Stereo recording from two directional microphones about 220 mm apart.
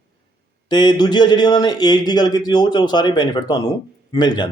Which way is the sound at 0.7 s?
20° left (ahead or behind).